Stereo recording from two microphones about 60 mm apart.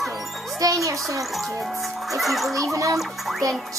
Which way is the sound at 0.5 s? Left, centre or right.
Right.